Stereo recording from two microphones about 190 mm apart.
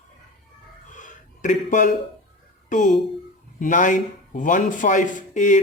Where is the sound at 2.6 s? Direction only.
40° left (ahead or behind).